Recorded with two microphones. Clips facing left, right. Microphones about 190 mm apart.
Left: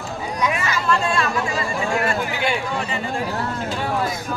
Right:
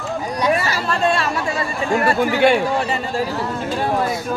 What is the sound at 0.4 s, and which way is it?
Chatter, 35° right (ahead or behind).